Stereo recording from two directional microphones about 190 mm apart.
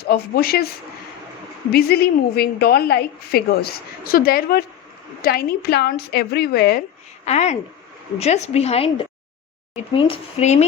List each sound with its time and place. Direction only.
0.0 s a woman's voice: 55° left (ahead or behind)
1.7 s a woman's voice: 55° left (ahead or behind)
7.3 s a woman's voice: 35° left (ahead or behind)